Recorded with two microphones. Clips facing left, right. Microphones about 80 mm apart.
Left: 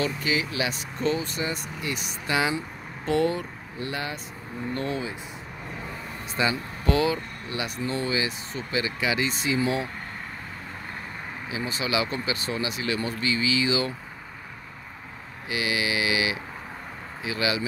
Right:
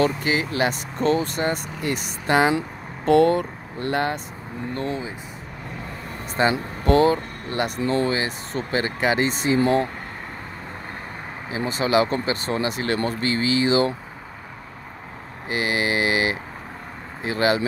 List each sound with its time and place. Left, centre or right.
0.0 s speech: right
4.7 s speech: right
6.4 s speech: right
8.1 s speech: right
9.6 s speech: right
11.5 s speech: right
15.5 s speech: right